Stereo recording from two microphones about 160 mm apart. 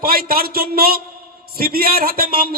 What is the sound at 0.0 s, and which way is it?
A man's voice, 65° right (ahead or behind).